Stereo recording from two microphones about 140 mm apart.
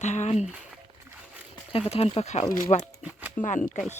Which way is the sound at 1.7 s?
45° left (ahead or behind).